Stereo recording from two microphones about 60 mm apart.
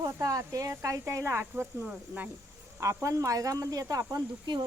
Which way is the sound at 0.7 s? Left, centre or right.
Right.